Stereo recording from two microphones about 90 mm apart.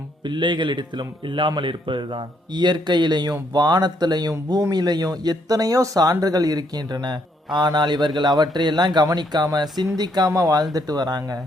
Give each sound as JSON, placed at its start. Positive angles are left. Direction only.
{"t": 0.3, "sound": "a man's voice", "side_deg": -60}